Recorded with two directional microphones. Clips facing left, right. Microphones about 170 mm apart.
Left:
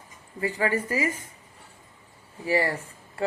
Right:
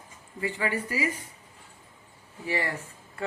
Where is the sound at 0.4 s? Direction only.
40° left (ahead or behind).